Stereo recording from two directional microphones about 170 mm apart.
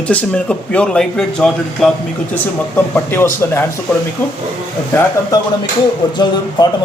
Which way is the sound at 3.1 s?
15° left (ahead or behind).